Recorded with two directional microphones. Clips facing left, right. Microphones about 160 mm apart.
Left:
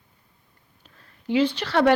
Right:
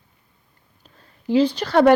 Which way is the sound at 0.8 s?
35° right (ahead or behind).